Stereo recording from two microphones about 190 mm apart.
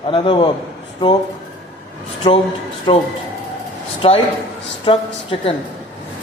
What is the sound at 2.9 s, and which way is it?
Speech, 25° left (ahead or behind).